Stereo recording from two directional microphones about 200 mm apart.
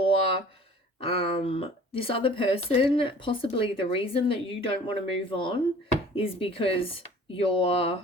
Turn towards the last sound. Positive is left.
turn(degrees=30)  # may be behind; listen again after turning